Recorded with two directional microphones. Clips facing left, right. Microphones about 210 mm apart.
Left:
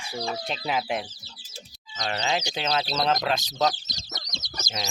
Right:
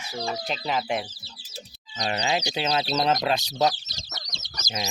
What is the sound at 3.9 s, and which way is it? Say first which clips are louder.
Chicken: left 2 dB; 15° left (ahead or behind).